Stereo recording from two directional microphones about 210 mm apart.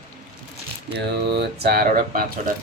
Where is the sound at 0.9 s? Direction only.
50° right (ahead or behind).